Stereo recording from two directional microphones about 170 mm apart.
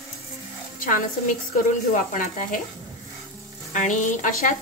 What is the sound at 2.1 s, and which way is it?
Speech, 50° left (ahead or behind).